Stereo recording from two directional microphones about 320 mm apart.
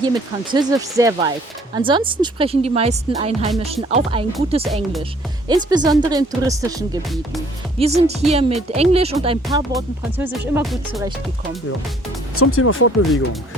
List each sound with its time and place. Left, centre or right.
0.0 s speech: centre
4.7 s speech: centre
5.5 s speech: centre
9.7 s speech: centre
12.4 s speech: left